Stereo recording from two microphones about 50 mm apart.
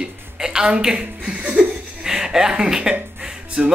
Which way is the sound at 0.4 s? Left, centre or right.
Centre.